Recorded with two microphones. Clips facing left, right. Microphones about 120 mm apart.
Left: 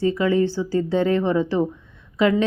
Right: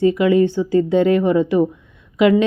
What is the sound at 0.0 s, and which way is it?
Speech, 15° right (ahead or behind).